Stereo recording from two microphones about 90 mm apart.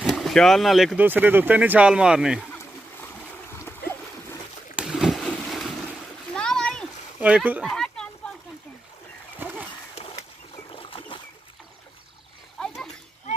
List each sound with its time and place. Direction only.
0.0 s speech: centre (ahead or behind)
0.9 s speech: 20° right (ahead or behind)
3.4 s boat: 30° left (ahead or behind)
4.7 s boat: 5° right (ahead or behind)
6.3 s splash: 10° left (ahead or behind)
7.2 s speech: 15° right (ahead or behind)
7.6 s a sound: 5° left (ahead or behind)
9.4 s a sound: 20° right (ahead or behind)
10.7 s a sound: 90° left
12.5 s splash: 5° left (ahead or behind)